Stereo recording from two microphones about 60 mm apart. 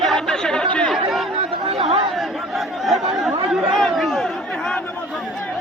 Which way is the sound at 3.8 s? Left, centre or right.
Centre.